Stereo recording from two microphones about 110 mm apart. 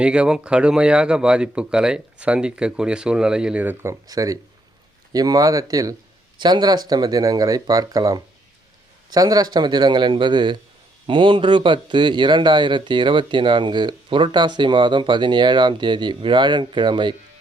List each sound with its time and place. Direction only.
0.0 s speech: 10° right (ahead or behind)
4.0 s speech: 30° right (ahead or behind)